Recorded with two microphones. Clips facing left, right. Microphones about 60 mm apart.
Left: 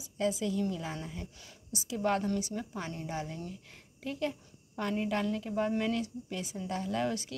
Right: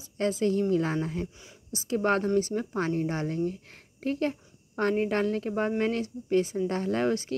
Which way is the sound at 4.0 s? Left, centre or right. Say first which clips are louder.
Right 6 dB; right.